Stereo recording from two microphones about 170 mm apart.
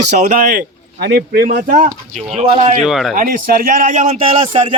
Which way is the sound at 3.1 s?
50° right (ahead or behind).